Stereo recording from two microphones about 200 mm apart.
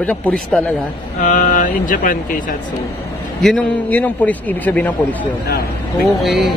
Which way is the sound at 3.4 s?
5° left (ahead or behind).